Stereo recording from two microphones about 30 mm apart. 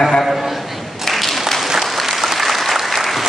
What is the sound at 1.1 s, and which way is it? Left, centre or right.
Applause, centre.